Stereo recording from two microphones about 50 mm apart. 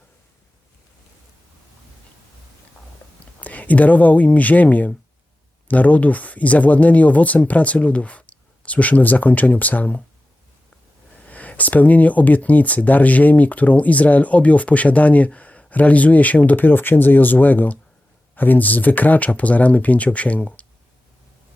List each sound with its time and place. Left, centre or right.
3.4 s speech: left
11.2 s speech: left